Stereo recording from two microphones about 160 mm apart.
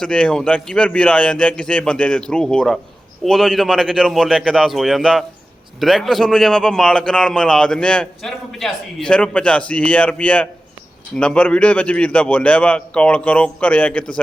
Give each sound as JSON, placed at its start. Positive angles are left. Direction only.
{"t": 0.0, "sound": "a man's voice", "side_deg": 5}